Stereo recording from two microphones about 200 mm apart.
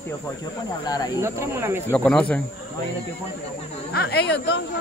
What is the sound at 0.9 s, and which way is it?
Speech, 20° left (ahead or behind).